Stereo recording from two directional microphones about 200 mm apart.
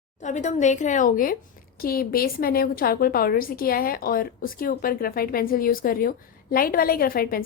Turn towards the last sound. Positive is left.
turn(degrees=45)  # may be behind; listen again after turning